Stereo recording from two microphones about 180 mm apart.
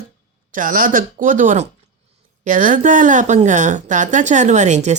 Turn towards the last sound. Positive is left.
turn(degrees=-40)  # may be behind; listen again after turning